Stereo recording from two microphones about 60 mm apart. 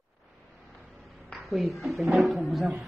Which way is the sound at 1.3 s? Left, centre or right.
Centre.